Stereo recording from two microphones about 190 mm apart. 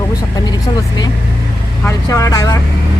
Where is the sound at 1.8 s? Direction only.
15° left (ahead or behind).